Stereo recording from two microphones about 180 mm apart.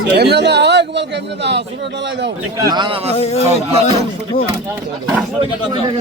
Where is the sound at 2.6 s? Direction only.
20° right (ahead or behind).